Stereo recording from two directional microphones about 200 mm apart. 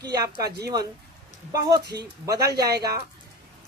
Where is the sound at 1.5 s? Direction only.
20° right (ahead or behind).